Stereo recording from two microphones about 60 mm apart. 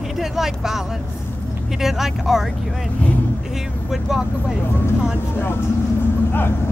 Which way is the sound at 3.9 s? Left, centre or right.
Centre.